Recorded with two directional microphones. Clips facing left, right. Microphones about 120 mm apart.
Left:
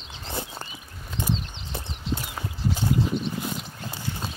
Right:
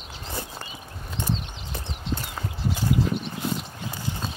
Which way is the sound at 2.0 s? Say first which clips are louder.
Even; 5° left (ahead or behind).